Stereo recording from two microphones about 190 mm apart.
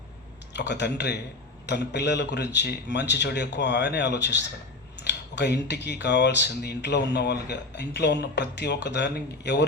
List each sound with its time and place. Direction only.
0.5 s speech: 65° left (ahead or behind)